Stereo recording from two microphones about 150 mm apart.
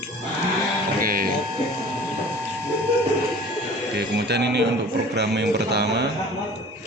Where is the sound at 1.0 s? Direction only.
70° right (ahead or behind).